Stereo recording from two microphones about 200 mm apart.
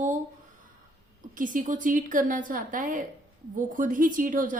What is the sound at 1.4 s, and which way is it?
A woman's voice, 40° right (ahead or behind).